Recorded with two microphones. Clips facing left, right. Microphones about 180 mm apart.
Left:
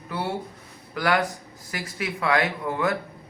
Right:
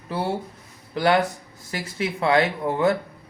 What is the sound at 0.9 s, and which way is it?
Speech, 25° right (ahead or behind).